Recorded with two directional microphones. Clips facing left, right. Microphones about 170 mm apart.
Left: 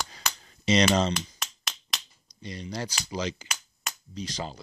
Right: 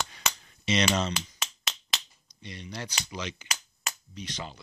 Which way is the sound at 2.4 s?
35° left (ahead or behind).